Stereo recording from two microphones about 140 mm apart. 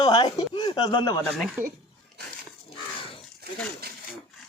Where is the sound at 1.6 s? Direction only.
15° right (ahead or behind).